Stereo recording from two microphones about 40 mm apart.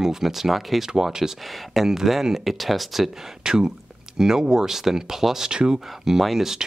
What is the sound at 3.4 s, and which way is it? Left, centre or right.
Speech, centre.